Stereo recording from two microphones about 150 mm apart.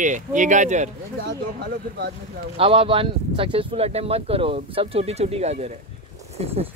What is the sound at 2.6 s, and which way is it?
Speech, 35° right (ahead or behind).